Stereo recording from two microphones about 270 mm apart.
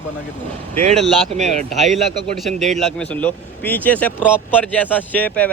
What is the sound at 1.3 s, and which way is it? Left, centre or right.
Speech, right.